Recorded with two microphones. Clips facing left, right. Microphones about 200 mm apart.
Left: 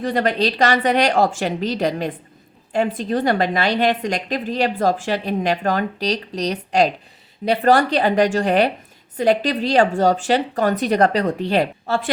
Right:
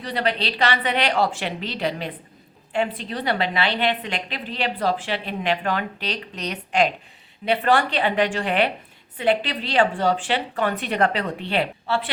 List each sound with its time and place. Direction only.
0.0 s a woman's voice: 45° left (ahead or behind)